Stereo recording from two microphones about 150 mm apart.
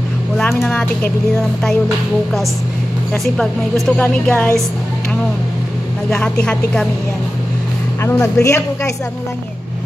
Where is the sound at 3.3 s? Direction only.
5° left (ahead or behind).